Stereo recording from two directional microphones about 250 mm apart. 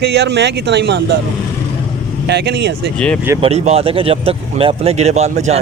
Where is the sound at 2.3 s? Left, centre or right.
Right.